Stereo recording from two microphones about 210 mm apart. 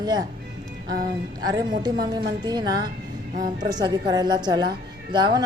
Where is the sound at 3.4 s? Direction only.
40° right (ahead or behind).